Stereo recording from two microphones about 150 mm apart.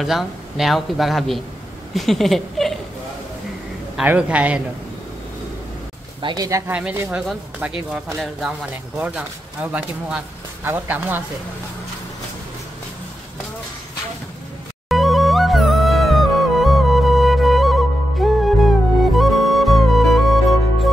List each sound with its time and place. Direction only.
0.0 s a man's voice: centre (ahead or behind)
2.0 s a sound: centre (ahead or behind)
3.9 s speech: 10° right (ahead or behind)
6.2 s speech: 25° right (ahead or behind)
6.7 s speech: 10° right (ahead or behind)
14.9 s music: centre (ahead or behind)